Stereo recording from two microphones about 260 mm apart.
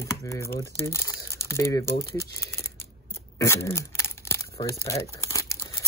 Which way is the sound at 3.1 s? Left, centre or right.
Centre.